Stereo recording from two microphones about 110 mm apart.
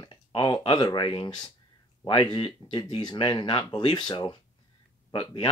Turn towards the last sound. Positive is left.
turn(degrees=50)  # may be behind; listen again after turning